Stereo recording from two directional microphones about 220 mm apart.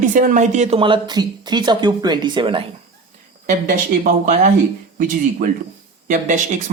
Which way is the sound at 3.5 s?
35° right (ahead or behind).